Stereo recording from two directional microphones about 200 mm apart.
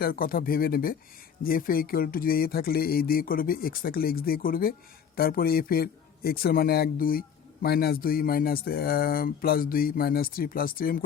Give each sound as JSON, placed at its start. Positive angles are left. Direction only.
{"t": 0.0, "sound": "a man's voice", "side_deg": 45}